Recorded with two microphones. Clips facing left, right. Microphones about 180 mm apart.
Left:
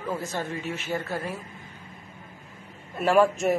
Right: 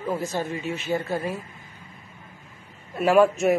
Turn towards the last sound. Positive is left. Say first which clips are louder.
# right 2 dB
turn(degrees=0)  # may be behind; listen again after turning